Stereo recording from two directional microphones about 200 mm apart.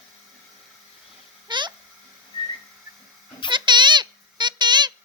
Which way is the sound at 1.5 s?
20° right (ahead or behind).